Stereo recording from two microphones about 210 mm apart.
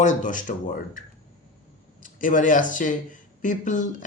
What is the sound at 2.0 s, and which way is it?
Speech, 40° left (ahead or behind).